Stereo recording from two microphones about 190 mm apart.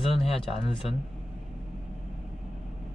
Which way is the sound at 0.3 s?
30° left (ahead or behind).